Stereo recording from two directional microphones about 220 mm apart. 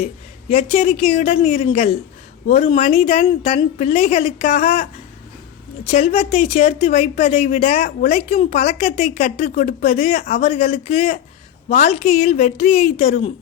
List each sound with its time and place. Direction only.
0.5 s a woman's voice: 25° left (ahead or behind)
5.8 s a woman's voice: 30° left (ahead or behind)
10.2 s speech: 40° left (ahead or behind)
10.5 s a woman's voice: 30° left (ahead or behind)